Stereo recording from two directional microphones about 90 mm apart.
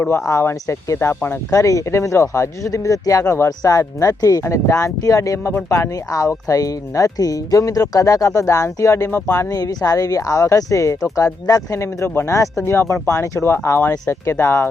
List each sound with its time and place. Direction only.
0.0 s speech: 30° left (ahead or behind)
1.5 s speech: 35° left (ahead or behind)
9.5 s speech: 40° left (ahead or behind)